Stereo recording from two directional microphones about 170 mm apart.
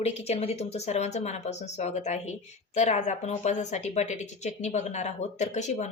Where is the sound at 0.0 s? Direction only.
40° left (ahead or behind).